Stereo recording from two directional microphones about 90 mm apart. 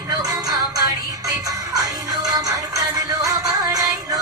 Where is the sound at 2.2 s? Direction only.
40° right (ahead or behind).